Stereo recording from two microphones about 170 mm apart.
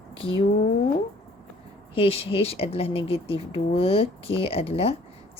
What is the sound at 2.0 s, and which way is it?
Speech, 35° left (ahead or behind).